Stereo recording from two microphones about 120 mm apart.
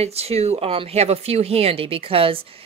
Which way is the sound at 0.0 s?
60° right (ahead or behind).